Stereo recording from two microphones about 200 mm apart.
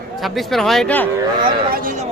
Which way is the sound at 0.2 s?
Centre (ahead or behind).